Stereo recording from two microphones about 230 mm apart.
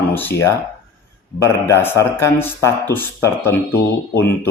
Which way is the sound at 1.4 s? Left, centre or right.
Centre.